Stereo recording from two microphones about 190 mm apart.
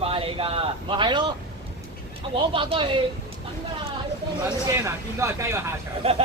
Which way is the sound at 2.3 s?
30° right (ahead or behind).